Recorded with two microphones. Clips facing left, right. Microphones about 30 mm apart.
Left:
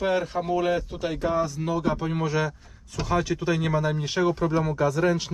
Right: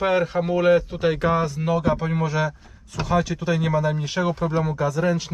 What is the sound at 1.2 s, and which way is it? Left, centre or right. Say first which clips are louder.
Speech: right 3 dB; right.